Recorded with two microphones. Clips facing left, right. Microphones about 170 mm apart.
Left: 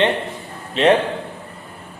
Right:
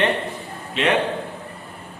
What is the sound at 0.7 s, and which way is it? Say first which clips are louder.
Speech: left 6 dB; 35° left (ahead or behind).